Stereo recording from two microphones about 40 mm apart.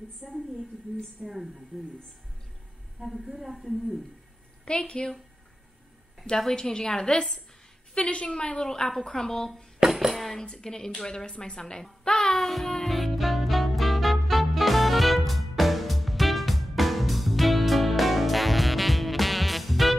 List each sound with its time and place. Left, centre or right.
0.2 s a woman's voice: right
1.2 s a woman's voice: centre
3.0 s a woman's voice: centre
3.3 s a woman's voice: centre
4.6 s a woman's voice: left
6.2 s a woman's voice: centre
9.8 s tambourine: centre
10.4 s a woman's voice: centre
12.0 s a sound: centre
12.4 s a woman's voice: centre
12.7 s music: centre